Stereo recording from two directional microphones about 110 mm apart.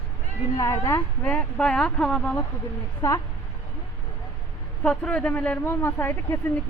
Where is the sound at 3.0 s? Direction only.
35° left (ahead or behind).